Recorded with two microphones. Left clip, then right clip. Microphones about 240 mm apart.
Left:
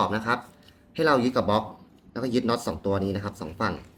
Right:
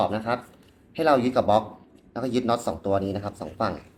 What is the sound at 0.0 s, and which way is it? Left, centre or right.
Speech, left.